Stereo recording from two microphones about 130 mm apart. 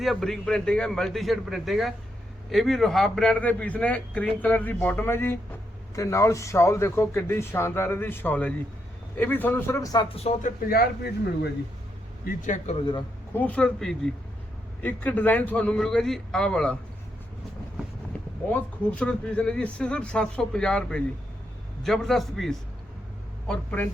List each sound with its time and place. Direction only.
0.0 s a man's voice: centre (ahead or behind); by 10.1 s 30° left (ahead or behind)
12.2 s speech: 80° left
12.7 s a man's voice: 35° left (ahead or behind)
13.3 s a man's voice: 10° left (ahead or behind)
18.1 s a sound: 10° left (ahead or behind)
18.5 s a man's voice: 10° left (ahead or behind)
23.5 s a man's voice: 15° left (ahead or behind)